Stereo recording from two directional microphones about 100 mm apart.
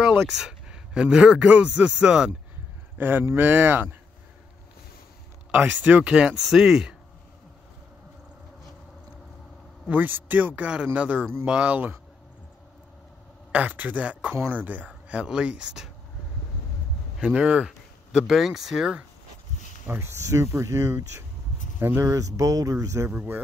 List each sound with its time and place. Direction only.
0.1 s speech: 5° right (ahead or behind)
5.5 s speech: 15° right (ahead or behind)
9.8 s speech: 15° right (ahead or behind)
13.5 s speech: 15° right (ahead or behind)
17.2 s speech: 10° right (ahead or behind)
19.9 s speech: 25° right (ahead or behind)
23.1 s speech: 20° right (ahead or behind)